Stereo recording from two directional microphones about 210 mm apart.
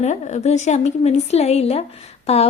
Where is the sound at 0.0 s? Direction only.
35° left (ahead or behind).